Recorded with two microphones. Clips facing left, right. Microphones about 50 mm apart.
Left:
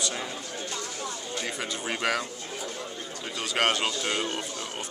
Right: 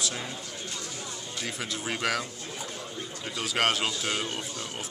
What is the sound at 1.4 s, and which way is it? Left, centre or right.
Speech, centre.